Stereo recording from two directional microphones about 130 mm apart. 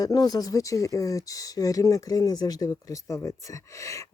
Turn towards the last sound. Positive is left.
turn(degrees=25)  # may be behind; listen again after turning